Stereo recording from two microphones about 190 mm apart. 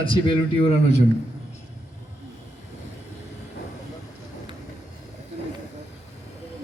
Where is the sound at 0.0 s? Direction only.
30° left (ahead or behind).